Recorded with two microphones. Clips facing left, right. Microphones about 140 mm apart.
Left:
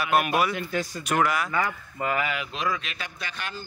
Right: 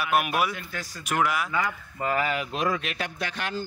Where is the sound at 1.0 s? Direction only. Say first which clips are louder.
Even; 5° right (ahead or behind).